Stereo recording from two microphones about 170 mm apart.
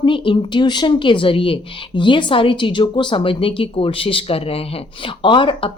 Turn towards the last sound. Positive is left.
turn(degrees=30)  # may be behind; listen again after turning